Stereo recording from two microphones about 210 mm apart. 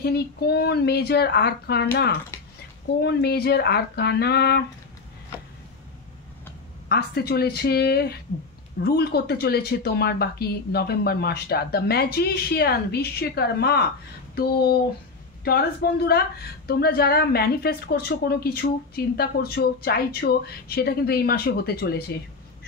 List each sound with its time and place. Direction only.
0.0 s a woman's voice: 50° left (ahead or behind)
6.9 s a woman's voice: 50° left (ahead or behind)